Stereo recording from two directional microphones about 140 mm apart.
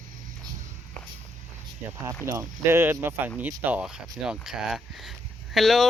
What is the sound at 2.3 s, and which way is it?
Speech, 15° right (ahead or behind).